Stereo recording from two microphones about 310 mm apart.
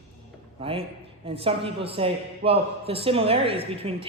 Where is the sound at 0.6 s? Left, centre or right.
Centre.